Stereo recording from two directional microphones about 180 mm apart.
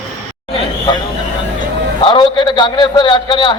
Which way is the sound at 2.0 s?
25° left (ahead or behind).